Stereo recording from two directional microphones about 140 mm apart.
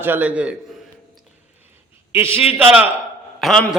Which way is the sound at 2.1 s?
15° right (ahead or behind).